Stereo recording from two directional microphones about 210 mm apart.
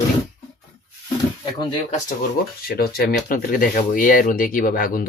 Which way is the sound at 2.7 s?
50° left (ahead or behind).